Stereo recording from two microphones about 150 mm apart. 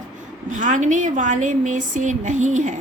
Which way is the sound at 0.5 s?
55° right (ahead or behind).